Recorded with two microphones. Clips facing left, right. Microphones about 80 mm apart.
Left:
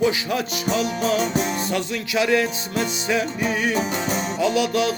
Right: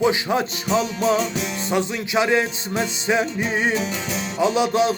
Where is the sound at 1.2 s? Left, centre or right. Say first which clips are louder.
Left 2 dB; left.